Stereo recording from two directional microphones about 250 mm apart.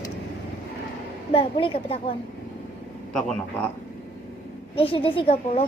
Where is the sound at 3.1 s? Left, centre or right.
Centre.